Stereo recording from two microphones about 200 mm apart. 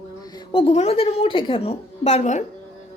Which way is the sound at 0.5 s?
30° left (ahead or behind).